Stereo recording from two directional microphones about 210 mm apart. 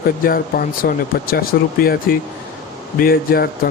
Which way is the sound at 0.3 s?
45° left (ahead or behind).